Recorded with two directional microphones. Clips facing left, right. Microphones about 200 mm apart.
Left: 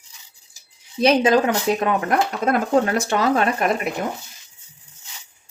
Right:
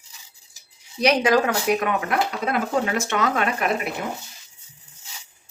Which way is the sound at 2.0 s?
45° left (ahead or behind).